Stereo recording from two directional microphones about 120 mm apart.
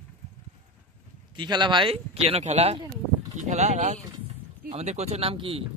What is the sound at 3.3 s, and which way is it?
Speech, 75° right (ahead or behind).